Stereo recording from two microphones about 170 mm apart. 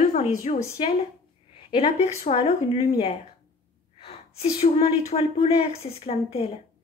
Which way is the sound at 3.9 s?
35° left (ahead or behind).